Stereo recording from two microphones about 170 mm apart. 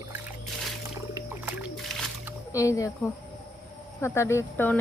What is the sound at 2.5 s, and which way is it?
Speech, 20° left (ahead or behind).